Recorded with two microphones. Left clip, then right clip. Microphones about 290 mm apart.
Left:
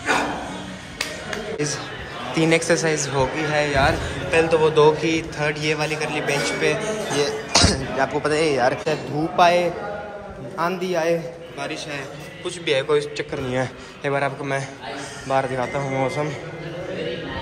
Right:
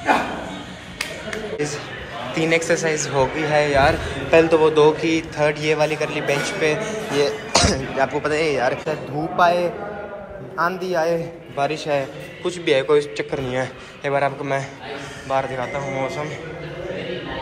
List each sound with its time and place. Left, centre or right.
2.3 s a man's voice: centre
11.5 s a man's voice: centre
12.4 s a man's voice: centre